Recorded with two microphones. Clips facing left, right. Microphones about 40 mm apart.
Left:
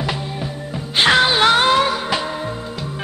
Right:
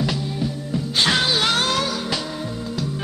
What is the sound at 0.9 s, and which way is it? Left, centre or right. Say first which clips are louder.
Music: left 6 dB; left.